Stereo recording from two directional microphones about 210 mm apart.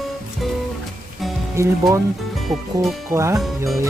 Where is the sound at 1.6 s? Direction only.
15° right (ahead or behind).